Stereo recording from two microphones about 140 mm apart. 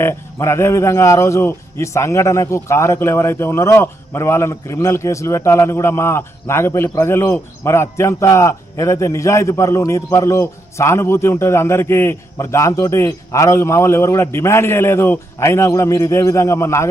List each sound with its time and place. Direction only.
0.0 s a man's voice: 20° left (ahead or behind)